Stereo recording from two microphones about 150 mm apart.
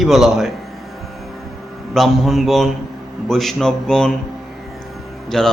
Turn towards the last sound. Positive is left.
turn(degrees=5)  # may be behind; listen again after turning